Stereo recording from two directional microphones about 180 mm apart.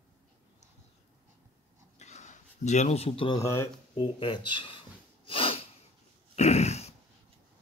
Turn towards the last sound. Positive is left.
turn(degrees=35)  # may be behind; listen again after turning